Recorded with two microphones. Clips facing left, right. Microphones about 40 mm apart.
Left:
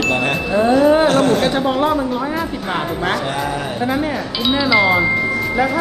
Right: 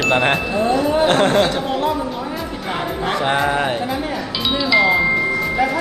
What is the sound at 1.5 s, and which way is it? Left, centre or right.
Speech, centre.